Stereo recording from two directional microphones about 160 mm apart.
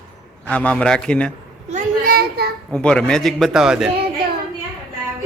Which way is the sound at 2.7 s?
5° left (ahead or behind).